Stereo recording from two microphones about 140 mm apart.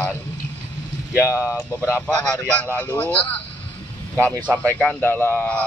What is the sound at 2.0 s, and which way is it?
A man's voice, 5° left (ahead or behind).